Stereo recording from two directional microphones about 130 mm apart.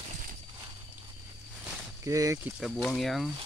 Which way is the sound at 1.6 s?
25° right (ahead or behind).